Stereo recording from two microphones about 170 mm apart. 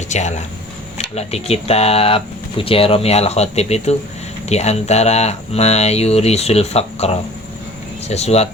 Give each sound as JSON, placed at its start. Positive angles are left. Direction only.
{"t": 0.1, "sound": "speech", "side_deg": 45}